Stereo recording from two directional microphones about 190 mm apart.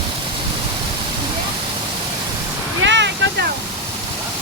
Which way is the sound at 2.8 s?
70° right (ahead or behind).